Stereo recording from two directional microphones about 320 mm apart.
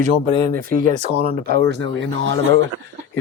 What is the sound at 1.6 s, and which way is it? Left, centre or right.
Speech, right.